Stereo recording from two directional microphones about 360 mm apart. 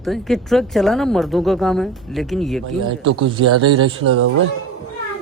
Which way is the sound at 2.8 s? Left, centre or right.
Right.